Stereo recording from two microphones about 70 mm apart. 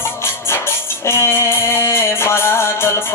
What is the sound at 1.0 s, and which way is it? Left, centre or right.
Music, left.